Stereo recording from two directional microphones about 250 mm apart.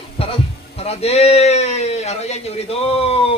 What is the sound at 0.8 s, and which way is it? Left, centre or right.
Speech, left.